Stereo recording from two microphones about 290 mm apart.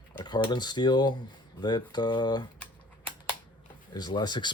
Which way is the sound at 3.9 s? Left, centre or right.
Centre.